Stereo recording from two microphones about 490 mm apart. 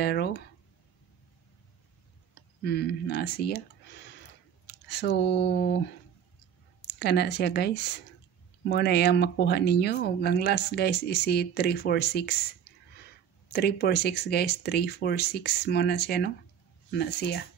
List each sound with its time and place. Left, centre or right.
0.0 s a sound: centre
2.6 s speech: centre
6.9 s speech: centre
13.5 s speech: centre